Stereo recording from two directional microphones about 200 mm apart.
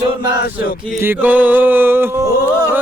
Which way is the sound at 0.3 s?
50° left (ahead or behind).